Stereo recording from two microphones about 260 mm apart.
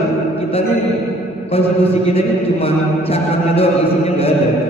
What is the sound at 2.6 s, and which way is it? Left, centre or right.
A man's voice, left.